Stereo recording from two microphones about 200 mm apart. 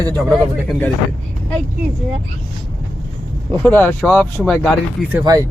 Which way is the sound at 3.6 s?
5° left (ahead or behind).